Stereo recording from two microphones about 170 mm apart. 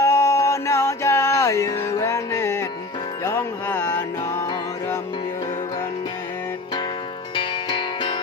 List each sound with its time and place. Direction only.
0.0 s music: 15° left (ahead or behind)
7.3 s music: 30° left (ahead or behind)